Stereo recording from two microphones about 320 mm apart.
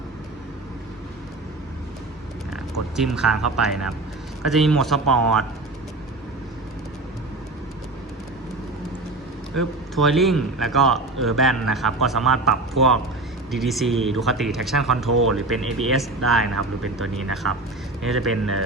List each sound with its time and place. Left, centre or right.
2.5 s a man's voice: centre
9.6 s a man's voice: centre
16.6 s speech: right